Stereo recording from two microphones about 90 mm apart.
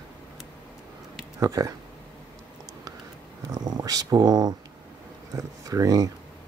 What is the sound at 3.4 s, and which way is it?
Speech, 50° right (ahead or behind).